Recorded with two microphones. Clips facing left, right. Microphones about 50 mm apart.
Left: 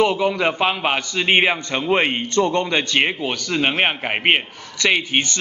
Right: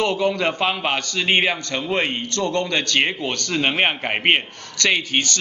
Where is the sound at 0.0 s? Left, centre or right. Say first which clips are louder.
Left 2 dB; centre.